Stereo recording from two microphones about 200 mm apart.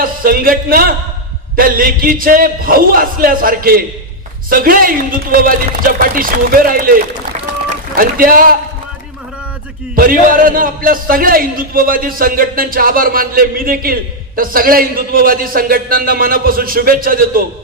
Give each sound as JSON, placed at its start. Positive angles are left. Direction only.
{"t": 0.0, "sound": "a man's voice", "side_deg": -45}
{"t": 9.9, "sound": "a man's voice", "side_deg": -45}